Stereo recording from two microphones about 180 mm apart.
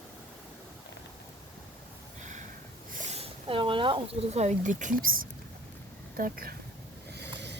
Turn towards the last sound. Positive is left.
turn(degrees=-70)  # may be behind; listen again after turning